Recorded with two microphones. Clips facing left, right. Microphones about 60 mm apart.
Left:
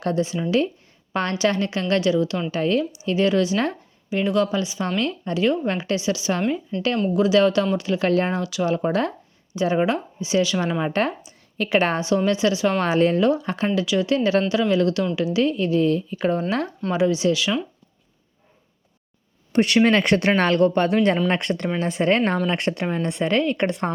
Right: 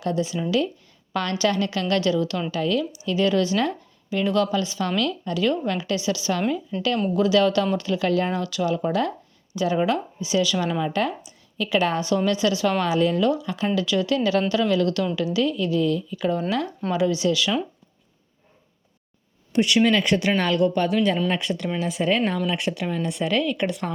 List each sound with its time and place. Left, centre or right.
0.0 s a woman's voice: left
2.5 s speech: left
6.7 s a woman's voice: centre
7.2 s speech: left
8.0 s a woman's voice: left
11.9 s speech: left
12.8 s a woman's voice: left
13.4 s a woman's voice: left
13.7 s a woman's voice: left
19.5 s speech: left
22.9 s a woman's voice: left